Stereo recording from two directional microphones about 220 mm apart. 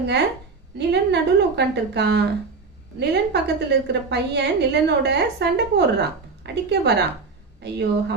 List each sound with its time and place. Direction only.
0.8 s a woman's voice: 50° right (ahead or behind)